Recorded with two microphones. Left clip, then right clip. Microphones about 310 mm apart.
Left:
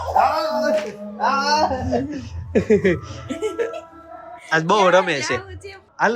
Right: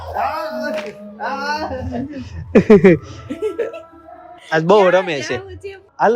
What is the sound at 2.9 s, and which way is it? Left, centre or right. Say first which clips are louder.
Speech: right 8 dB; centre.